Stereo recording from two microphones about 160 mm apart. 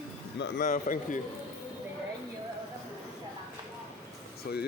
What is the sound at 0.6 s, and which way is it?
Speech, 55° left (ahead or behind).